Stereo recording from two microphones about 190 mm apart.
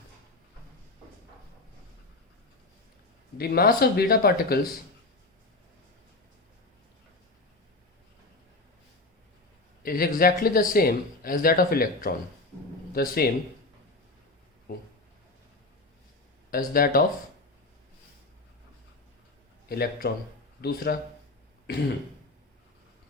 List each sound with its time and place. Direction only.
3.3 s speech: 55° left (ahead or behind)
9.8 s speech: 50° left (ahead or behind)
14.7 s speech: 50° left (ahead or behind)
16.5 s speech: 50° left (ahead or behind)
19.6 s a man's voice: 55° left (ahead or behind)